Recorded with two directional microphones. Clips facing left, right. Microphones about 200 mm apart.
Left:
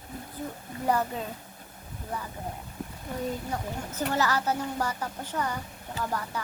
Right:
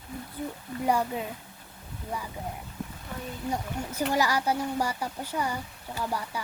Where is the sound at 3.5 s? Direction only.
10° right (ahead or behind).